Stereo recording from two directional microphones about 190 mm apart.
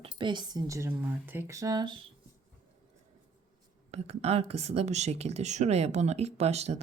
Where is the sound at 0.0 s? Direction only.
25° right (ahead or behind).